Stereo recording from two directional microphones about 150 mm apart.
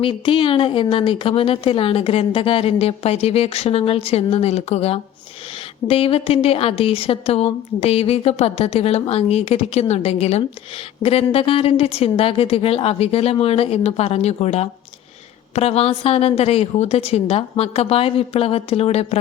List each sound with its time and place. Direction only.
0.0 s a woman's voice: 35° left (ahead or behind)